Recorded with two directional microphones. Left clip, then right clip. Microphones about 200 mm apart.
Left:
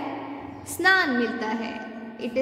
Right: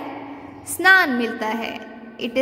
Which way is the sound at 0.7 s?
25° right (ahead or behind).